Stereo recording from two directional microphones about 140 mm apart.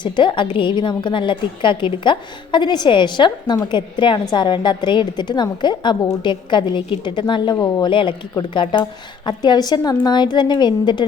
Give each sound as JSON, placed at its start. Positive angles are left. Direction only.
{"t": 0.0, "sound": "a woman's voice", "side_deg": 35}